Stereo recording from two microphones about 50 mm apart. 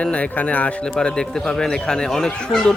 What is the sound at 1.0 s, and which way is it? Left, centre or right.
Speech, centre.